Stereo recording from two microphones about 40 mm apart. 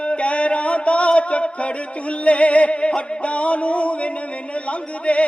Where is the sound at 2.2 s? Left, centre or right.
Left.